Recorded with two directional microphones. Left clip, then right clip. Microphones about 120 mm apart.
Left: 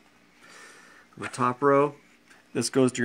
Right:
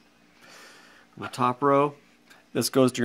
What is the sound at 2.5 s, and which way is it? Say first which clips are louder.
Speech: right 2 dB; 20° right (ahead or behind).